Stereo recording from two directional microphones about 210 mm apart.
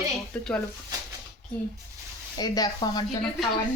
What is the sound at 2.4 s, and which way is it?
Speech, 20° left (ahead or behind).